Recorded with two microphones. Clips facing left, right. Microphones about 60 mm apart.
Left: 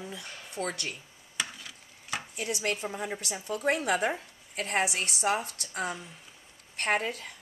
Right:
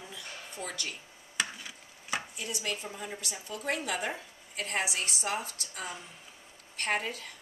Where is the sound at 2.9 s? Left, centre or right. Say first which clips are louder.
Left 5 dB; left.